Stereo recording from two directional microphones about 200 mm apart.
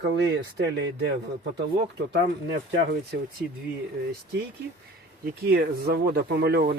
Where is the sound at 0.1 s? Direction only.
60° right (ahead or behind).